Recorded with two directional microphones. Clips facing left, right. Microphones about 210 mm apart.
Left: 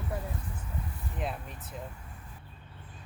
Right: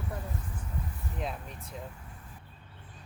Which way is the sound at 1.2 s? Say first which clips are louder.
Left 1 dB; centre (ahead or behind).